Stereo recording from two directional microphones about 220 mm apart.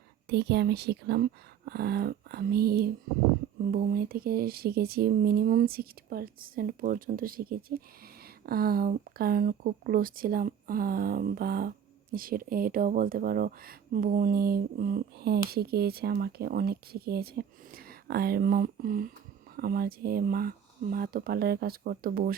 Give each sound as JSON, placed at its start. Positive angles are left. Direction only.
{"t": 0.3, "sound": "speech", "side_deg": -50}